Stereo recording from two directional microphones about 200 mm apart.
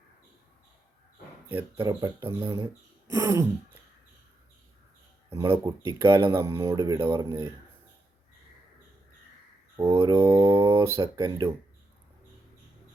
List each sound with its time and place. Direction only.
1.5 s speech: 10° right (ahead or behind)
5.3 s speech: 15° right (ahead or behind)
9.7 s speech: 30° right (ahead or behind)
10.0 s speech: 15° right (ahead or behind)